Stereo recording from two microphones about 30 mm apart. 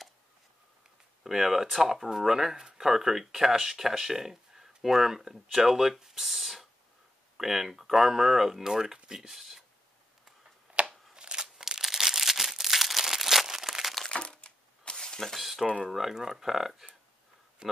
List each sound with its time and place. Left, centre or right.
1.2 s speech: centre
9.3 s speech: centre
10.7 s shuffling cards: right
11.1 s a sound: right
11.8 s crumpling: centre
14.1 s a sound: left
15.3 s speech: centre